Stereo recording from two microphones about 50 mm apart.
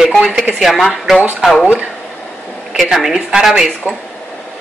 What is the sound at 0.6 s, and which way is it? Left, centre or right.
Speech, centre.